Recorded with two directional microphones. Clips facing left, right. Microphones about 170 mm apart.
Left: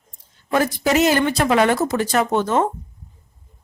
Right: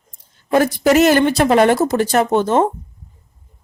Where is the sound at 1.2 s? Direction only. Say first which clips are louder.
Right 4 dB; 35° right (ahead or behind).